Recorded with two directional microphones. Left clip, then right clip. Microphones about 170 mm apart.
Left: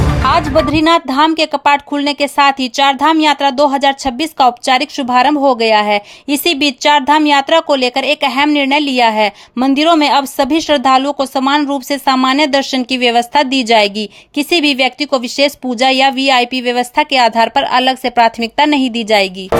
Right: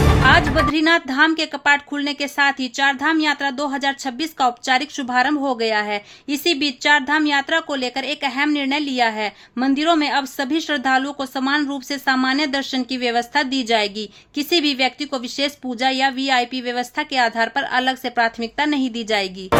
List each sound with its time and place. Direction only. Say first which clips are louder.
0.3 s a woman's voice: left 4 dB; 30° left (ahead or behind)